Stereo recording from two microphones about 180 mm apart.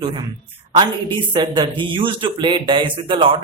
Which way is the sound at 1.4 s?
25° right (ahead or behind).